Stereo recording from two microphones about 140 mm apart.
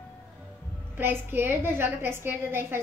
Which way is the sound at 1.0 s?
15° right (ahead or behind).